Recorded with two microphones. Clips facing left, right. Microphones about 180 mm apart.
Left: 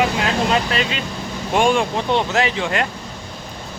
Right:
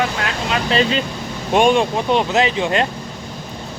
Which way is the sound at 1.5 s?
20° right (ahead or behind).